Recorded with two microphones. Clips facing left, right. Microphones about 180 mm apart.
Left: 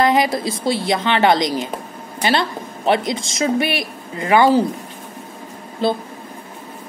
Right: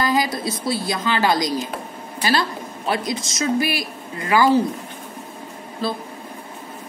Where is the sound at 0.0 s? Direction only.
25° left (ahead or behind).